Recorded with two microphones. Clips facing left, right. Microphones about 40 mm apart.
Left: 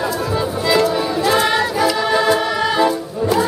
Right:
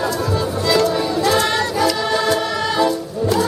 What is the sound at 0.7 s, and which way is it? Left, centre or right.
Music, centre.